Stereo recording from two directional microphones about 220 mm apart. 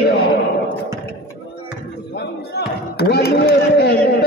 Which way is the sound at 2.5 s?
45° left (ahead or behind).